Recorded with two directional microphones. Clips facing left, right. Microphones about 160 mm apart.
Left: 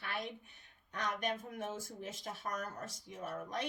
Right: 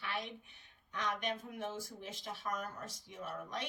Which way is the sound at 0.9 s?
45° left (ahead or behind).